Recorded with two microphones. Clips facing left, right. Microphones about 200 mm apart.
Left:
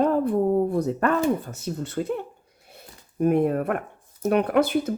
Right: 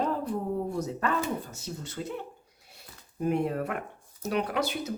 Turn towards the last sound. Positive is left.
turn(degrees=55)  # may be behind; listen again after turning